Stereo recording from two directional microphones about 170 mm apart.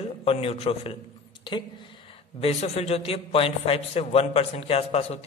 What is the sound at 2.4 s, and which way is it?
A man's voice, 40° left (ahead or behind).